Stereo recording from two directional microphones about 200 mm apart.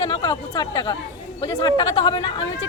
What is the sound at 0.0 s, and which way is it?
A woman's voice, 20° left (ahead or behind).